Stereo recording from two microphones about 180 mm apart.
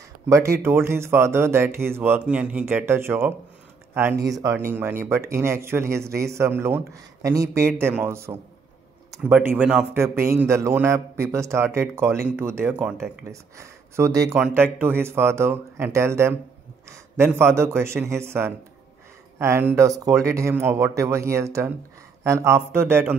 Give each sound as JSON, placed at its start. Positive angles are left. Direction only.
{"t": 0.3, "sound": "speech", "side_deg": -15}